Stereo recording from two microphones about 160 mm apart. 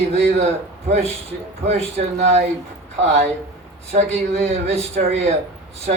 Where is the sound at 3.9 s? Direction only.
45° right (ahead or behind).